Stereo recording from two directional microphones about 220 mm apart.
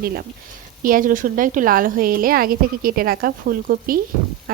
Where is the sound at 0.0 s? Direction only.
45° right (ahead or behind).